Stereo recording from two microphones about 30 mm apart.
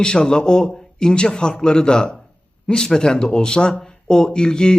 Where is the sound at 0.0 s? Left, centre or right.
Left.